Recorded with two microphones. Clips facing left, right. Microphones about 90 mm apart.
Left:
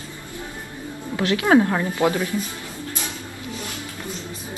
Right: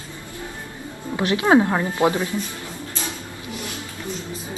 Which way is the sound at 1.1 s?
20° right (ahead or behind).